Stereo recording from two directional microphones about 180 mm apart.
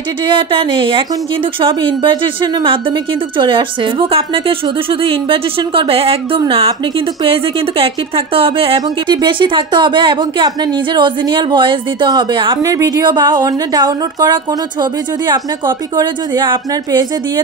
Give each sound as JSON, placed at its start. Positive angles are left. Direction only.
{"t": 0.3, "sound": "speech", "side_deg": -30}
{"t": 8.4, "sound": "speech", "side_deg": -30}